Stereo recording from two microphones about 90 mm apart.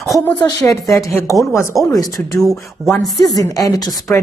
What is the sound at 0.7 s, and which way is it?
A woman's voice, 35° left (ahead or behind).